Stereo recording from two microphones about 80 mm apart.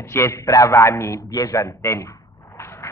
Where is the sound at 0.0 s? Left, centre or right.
Left.